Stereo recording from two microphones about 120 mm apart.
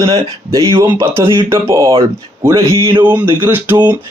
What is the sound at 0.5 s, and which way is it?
A man's voice, 25° right (ahead or behind).